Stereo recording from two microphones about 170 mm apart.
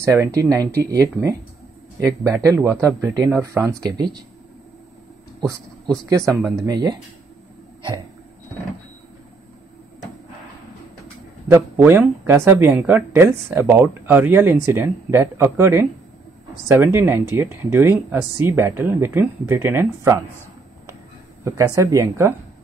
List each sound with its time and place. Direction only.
0.0 s speech: 20° right (ahead or behind)
6.0 s speech: 20° right (ahead or behind)
11.4 s speech: 15° right (ahead or behind)
21.5 s speech: 20° right (ahead or behind)